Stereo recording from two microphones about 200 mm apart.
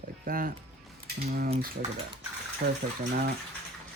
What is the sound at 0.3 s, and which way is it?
Speech, 45° right (ahead or behind).